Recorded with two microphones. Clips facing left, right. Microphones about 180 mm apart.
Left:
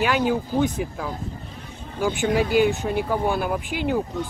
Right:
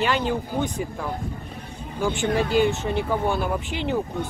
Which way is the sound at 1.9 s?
10° left (ahead or behind).